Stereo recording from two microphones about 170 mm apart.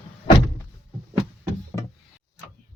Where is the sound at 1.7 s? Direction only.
15° left (ahead or behind).